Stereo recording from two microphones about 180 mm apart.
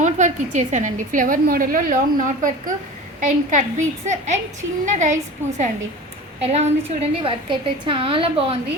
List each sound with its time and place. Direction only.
0.0 s a woman's voice: 40° right (ahead or behind)